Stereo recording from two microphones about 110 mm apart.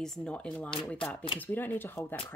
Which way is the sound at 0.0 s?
5° left (ahead or behind).